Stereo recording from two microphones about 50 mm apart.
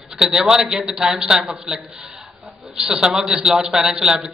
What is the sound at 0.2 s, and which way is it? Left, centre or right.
A man's voice, centre.